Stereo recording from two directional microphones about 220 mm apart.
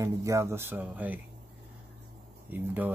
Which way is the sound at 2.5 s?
10° right (ahead or behind).